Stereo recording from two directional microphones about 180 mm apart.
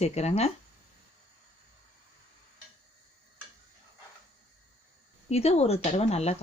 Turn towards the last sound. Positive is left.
turn(degrees=35)  # may be behind; listen again after turning